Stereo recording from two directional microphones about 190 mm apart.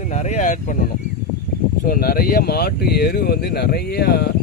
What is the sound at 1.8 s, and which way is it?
Speech, 50° left (ahead or behind).